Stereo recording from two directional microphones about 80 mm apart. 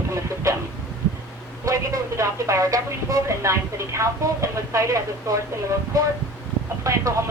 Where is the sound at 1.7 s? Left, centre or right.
Right.